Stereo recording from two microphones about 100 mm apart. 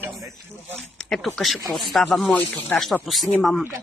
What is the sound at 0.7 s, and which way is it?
Speech, 5° left (ahead or behind).